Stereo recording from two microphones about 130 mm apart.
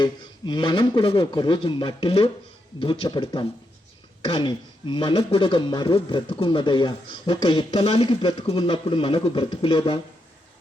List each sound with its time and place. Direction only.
0.0 s speech: 35° left (ahead or behind)